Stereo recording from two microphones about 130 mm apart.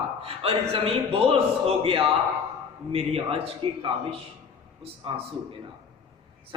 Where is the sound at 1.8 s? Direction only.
45° right (ahead or behind).